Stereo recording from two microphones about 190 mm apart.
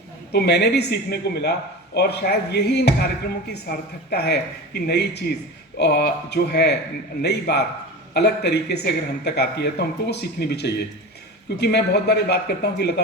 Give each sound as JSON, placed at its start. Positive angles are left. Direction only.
{"t": 0.3, "sound": "speech", "side_deg": 60}